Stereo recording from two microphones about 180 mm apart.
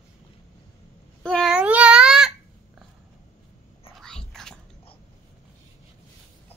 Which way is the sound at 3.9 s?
5° left (ahead or behind).